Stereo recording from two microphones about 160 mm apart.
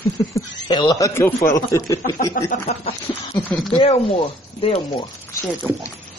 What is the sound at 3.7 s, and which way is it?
A woman's voice, 35° left (ahead or behind).